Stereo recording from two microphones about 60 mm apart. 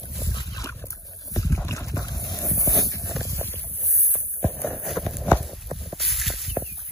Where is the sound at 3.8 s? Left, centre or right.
Centre.